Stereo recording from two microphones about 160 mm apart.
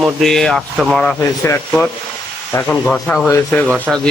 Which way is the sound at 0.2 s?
Centre (ahead or behind).